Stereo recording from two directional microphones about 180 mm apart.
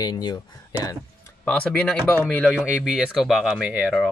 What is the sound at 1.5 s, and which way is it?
Speech, 5° left (ahead or behind).